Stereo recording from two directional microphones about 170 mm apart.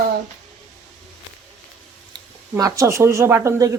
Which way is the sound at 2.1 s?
25° right (ahead or behind).